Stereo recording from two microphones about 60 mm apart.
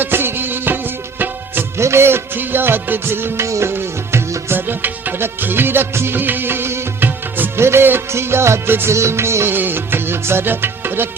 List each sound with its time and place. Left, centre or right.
0.0 s music: right
1.8 s music: right
3.4 s music: right
3.7 s music: right
7.3 s music: right